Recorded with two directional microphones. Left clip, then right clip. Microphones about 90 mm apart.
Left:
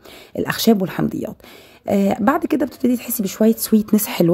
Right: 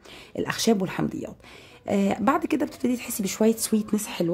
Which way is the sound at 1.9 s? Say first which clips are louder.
Left 6 dB; 35° left (ahead or behind).